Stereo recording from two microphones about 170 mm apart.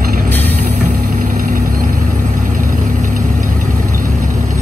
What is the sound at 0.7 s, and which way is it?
Vehicle, 50° right (ahead or behind).